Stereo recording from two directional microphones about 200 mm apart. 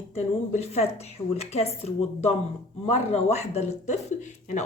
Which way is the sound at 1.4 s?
30° left (ahead or behind).